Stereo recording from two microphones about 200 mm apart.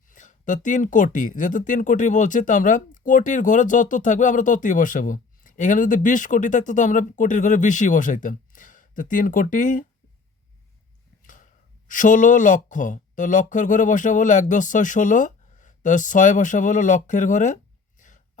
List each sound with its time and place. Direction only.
0.1 s speech: 40° left (ahead or behind)
11.9 s speech: 40° left (ahead or behind)
18.0 s a sound: 40° left (ahead or behind)